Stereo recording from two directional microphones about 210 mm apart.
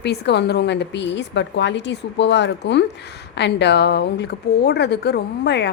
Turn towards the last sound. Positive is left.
turn(degrees=55)  # may be behind; listen again after turning